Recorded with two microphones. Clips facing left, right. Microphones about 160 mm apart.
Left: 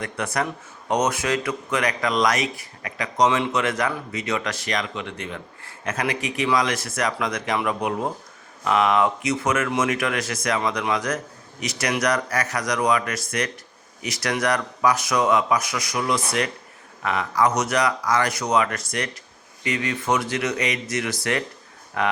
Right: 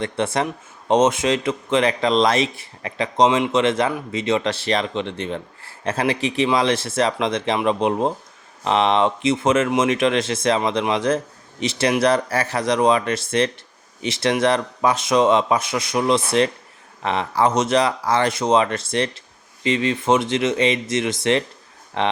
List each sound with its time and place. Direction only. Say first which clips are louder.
0.0 s speech: right 4 dB; 25° right (ahead or behind)